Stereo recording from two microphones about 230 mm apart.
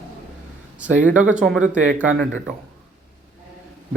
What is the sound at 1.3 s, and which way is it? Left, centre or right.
Speech, centre.